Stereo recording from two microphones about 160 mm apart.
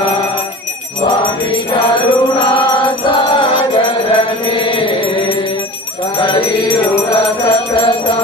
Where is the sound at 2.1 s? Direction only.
30° left (ahead or behind).